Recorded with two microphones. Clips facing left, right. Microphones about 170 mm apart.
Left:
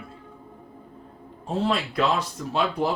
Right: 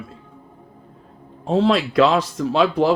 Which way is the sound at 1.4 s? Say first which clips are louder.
Right 8 dB; 90° right.